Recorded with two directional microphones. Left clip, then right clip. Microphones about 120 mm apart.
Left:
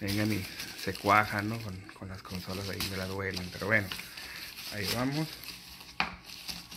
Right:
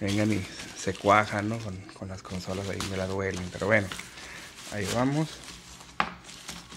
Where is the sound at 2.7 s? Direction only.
20° right (ahead or behind).